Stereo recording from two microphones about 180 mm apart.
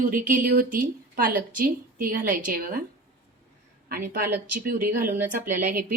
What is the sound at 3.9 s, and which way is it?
Speech, 50° right (ahead or behind).